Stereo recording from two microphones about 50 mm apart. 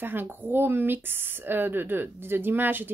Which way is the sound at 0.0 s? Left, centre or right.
Right.